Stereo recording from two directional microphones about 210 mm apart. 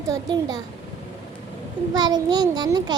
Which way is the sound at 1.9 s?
20° right (ahead or behind).